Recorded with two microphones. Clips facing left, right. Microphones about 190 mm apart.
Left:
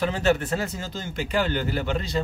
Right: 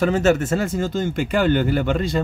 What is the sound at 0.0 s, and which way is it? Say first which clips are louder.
Speech: right 5 dB; 45° right (ahead or behind).